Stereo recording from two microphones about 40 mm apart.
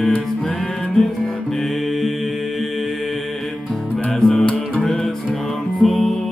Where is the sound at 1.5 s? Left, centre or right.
Centre.